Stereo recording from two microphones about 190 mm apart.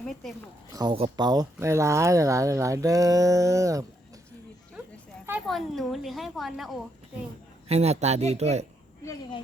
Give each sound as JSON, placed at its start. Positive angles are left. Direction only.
{"t": 0.0, "sound": "speech", "side_deg": 0}
{"t": 0.7, "sound": "speech", "side_deg": -20}
{"t": 5.5, "sound": "a woman's voice", "side_deg": 0}
{"t": 7.7, "sound": "speech", "side_deg": -35}